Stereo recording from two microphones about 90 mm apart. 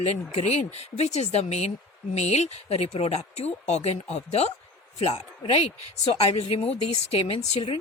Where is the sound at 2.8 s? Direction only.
90° left.